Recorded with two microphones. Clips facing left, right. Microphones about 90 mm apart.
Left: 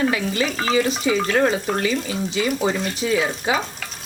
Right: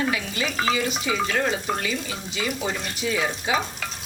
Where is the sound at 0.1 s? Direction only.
35° left (ahead or behind).